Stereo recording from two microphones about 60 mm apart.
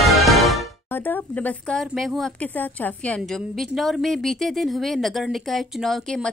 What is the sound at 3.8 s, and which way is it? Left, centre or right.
A woman's voice, centre.